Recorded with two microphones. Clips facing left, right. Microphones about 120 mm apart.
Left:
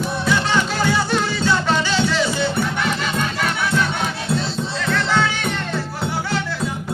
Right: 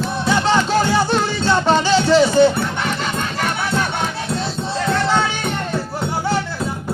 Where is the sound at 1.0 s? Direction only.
35° right (ahead or behind).